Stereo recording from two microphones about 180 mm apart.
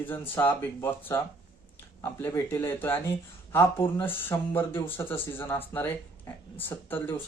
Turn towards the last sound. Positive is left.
turn(degrees=10)  # may be behind; listen again after turning